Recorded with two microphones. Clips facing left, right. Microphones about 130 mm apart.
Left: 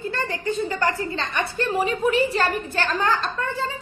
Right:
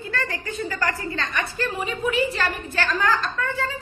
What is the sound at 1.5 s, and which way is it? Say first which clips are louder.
A woman's voice: left 4 dB; 35° left (ahead or behind).